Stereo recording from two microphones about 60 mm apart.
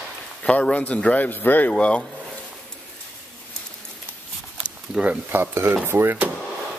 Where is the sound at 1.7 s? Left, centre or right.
Centre.